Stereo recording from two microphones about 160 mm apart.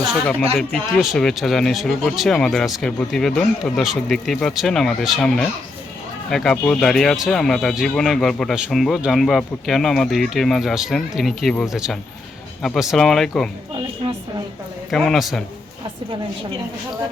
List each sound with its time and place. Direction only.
0.7 s speech: 5° left (ahead or behind)
14.8 s speech: centre (ahead or behind)